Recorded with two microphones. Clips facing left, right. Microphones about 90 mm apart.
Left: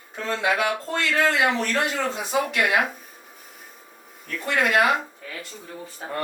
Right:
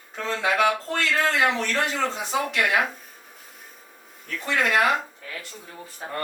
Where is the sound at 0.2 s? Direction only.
5° left (ahead or behind).